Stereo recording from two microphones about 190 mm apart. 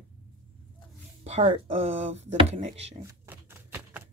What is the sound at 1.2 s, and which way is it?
Speech, 35° right (ahead or behind).